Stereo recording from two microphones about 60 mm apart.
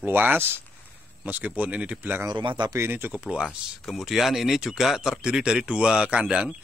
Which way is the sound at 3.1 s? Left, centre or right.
Centre.